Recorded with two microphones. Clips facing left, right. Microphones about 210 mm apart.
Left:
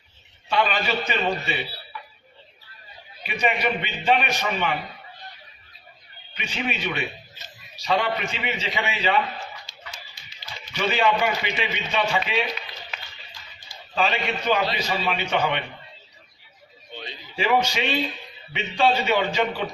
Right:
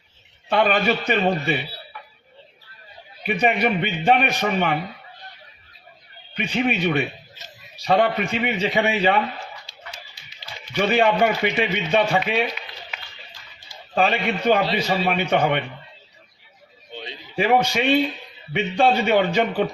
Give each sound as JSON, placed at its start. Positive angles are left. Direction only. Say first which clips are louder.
{"t": 0.4, "sound": "a man's voice", "louder": "right 5 dB", "side_deg": -55}
{"t": 3.2, "sound": "a man's voice", "louder": "right 4 dB", "side_deg": -55}
{"t": 6.3, "sound": "a man's voice", "louder": "right 7 dB", "side_deg": -55}
{"t": 9.7, "sound": "a sound", "louder": "right 2 dB", "side_deg": -30}
{"t": 10.8, "sound": "a man's voice", "louder": "right 4 dB", "side_deg": -50}
{"t": 13.9, "sound": "a man's voice", "louder": "right 4 dB", "side_deg": -55}
{"t": 17.3, "sound": "a man's voice", "louder": "right 3 dB", "side_deg": -55}